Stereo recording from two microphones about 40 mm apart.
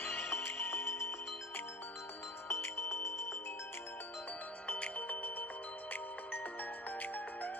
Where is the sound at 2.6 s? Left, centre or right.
Left.